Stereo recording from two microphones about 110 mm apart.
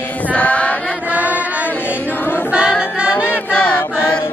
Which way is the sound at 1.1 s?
15° right (ahead or behind).